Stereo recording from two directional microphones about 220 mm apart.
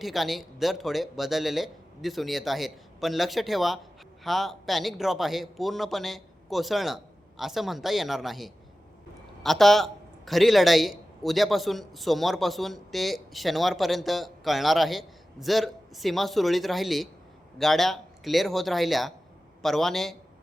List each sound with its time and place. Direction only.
0.0 s a man's voice: centre (ahead or behind)